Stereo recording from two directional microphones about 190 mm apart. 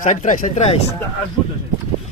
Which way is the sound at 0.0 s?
40° left (ahead or behind).